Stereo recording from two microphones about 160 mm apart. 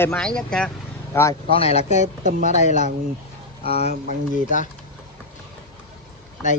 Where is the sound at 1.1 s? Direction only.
15° left (ahead or behind).